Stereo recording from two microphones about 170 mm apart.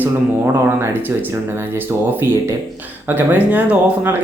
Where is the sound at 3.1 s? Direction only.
10° right (ahead or behind).